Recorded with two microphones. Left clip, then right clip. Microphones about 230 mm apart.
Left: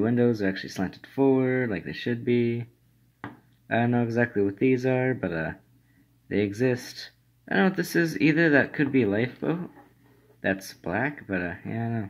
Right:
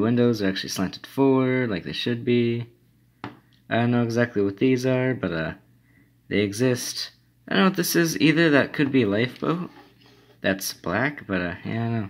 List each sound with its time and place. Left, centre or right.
0.0 s speech: centre